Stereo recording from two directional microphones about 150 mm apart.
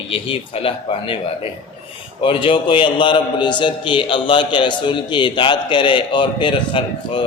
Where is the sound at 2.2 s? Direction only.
35° left (ahead or behind).